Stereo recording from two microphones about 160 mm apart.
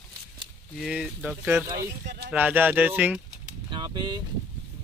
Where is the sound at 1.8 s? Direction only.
90° right.